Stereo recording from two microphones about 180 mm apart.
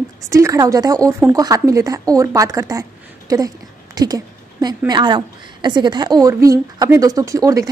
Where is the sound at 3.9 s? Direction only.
20° right (ahead or behind).